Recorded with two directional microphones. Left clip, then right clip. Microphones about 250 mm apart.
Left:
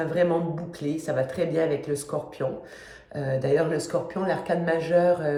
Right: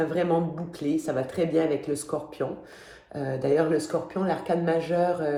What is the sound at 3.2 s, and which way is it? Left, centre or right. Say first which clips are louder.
Speech: left 1 dB; centre.